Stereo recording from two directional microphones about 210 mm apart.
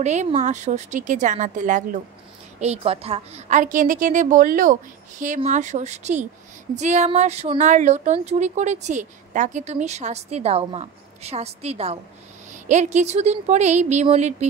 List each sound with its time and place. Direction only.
0.0 s speech: 35° right (ahead or behind)